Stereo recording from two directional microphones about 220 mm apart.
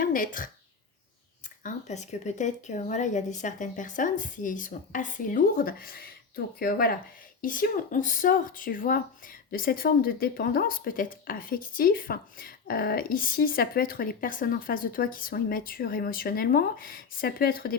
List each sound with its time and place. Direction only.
0.0 s a woman's voice: 40° left (ahead or behind)
1.6 s speech: 30° left (ahead or behind)